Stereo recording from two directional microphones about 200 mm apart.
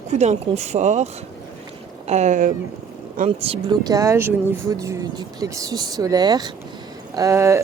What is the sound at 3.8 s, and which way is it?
Speech, 15° right (ahead or behind).